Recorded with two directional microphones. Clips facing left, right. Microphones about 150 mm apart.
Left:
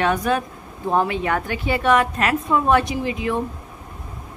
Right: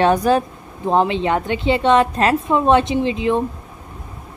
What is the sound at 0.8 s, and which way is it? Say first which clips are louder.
A woman's voice: right 4 dB; 20° right (ahead or behind).